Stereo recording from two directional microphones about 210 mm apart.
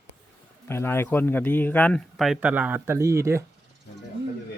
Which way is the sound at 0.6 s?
10° left (ahead or behind).